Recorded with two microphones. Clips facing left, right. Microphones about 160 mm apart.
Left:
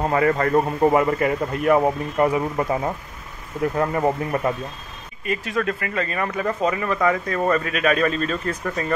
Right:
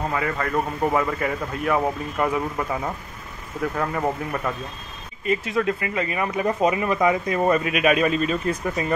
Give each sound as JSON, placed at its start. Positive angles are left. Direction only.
{"t": 0.1, "sound": "a man's voice", "side_deg": 35}
{"t": 0.8, "sound": "speech", "side_deg": 25}
{"t": 2.2, "sound": "speech", "side_deg": 15}
{"t": 3.7, "sound": "speech", "side_deg": 20}
{"t": 5.2, "sound": "speech", "side_deg": -20}